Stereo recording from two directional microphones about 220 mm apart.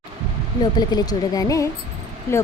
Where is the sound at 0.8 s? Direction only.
20° left (ahead or behind).